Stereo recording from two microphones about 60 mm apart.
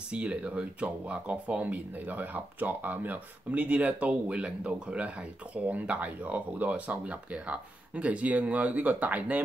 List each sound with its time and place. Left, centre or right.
0.1 s speech: centre